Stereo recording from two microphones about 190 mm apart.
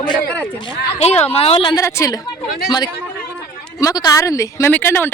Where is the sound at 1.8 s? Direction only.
15° left (ahead or behind).